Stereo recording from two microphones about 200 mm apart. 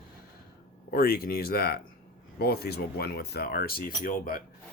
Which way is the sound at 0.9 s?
50° left (ahead or behind).